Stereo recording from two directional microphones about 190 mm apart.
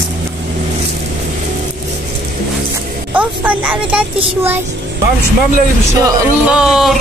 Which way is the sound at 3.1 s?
10° right (ahead or behind).